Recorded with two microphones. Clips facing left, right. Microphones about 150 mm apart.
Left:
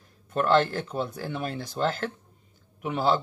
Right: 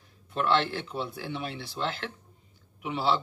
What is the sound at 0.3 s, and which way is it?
A man's voice, 45° left (ahead or behind).